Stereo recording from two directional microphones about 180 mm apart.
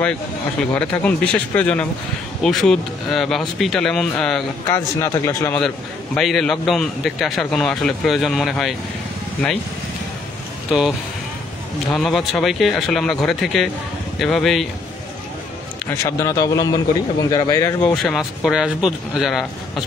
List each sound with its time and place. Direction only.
0.7 s a man's voice: 5° left (ahead or behind)
4.6 s speech: 15° left (ahead or behind)
6.1 s a man's voice: centre (ahead or behind)
10.7 s a man's voice: 5° right (ahead or behind)
11.9 s a man's voice: centre (ahead or behind)
16.0 s a man's voice: 15° left (ahead or behind)
17.8 s a man's voice: centre (ahead or behind)